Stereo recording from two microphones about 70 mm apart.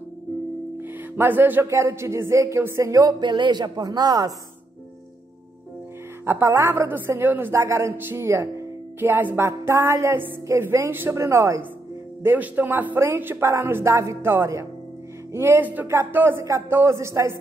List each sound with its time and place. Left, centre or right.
0.7 s music: right
1.7 s speech: right
3.1 s music: right
6.2 s speech: right
7.5 s speech: right
9.0 s speech: right
9.5 s speech: right
12.2 s speech: right
15.6 s speech: right